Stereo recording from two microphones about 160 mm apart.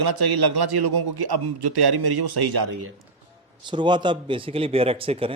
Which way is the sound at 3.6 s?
30° right (ahead or behind).